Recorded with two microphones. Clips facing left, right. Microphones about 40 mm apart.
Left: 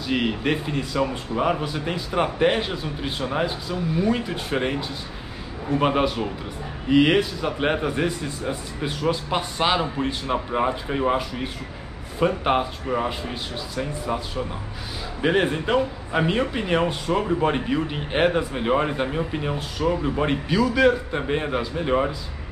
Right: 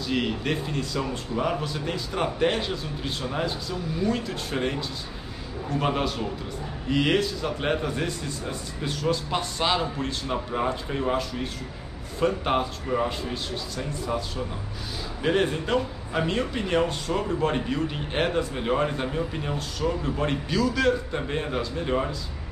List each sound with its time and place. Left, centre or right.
0.0 s a man's voice: centre